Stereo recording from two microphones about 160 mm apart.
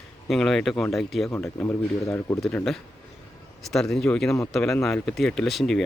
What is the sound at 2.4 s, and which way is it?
Speech, centre (ahead or behind).